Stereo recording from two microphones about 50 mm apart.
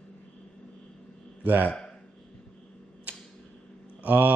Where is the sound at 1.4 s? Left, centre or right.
Right.